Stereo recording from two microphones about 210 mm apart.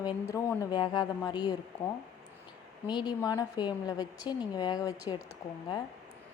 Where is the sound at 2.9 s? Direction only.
20° left (ahead or behind).